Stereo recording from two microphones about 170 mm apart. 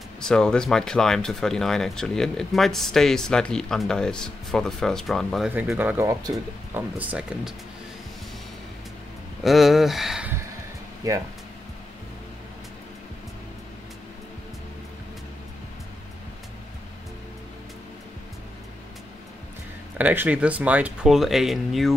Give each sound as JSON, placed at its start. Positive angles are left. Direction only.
{"t": 0.2, "sound": "speech", "side_deg": 5}
{"t": 5.5, "sound": "speech", "side_deg": -10}
{"t": 9.4, "sound": "speech", "side_deg": 0}
{"t": 11.0, "sound": "speech", "side_deg": -20}
{"t": 20.0, "sound": "speech", "side_deg": -10}